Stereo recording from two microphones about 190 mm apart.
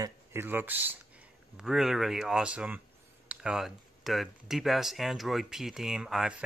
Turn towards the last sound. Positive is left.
turn(degrees=-5)  # may be behind; listen again after turning